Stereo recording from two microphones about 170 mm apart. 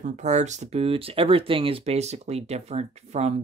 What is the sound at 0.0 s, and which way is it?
Speech, 45° right (ahead or behind).